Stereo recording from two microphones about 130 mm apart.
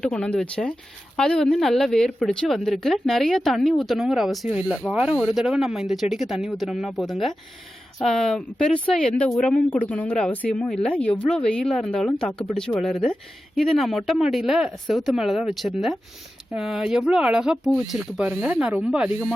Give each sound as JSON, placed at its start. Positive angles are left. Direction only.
{"t": 0.0, "sound": "a woman's voice", "side_deg": 10}